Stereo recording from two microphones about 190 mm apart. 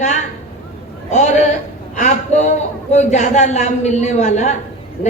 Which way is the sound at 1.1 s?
40° left (ahead or behind).